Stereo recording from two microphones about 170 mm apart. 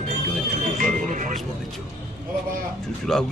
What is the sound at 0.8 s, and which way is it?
Speech, 50° right (ahead or behind).